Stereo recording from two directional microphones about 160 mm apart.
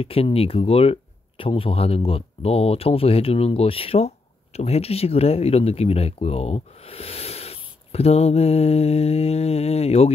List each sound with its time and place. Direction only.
0.0 s speech: 35° left (ahead or behind)